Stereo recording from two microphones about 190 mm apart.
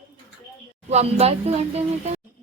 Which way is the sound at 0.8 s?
35° right (ahead or behind).